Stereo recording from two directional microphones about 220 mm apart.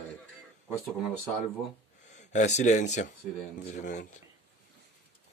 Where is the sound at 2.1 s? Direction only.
35° left (ahead or behind).